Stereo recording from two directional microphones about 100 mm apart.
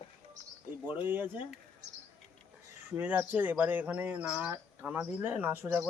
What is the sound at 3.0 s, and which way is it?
Speech, 20° right (ahead or behind).